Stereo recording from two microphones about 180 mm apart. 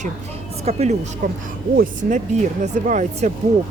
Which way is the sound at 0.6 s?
40° right (ahead or behind).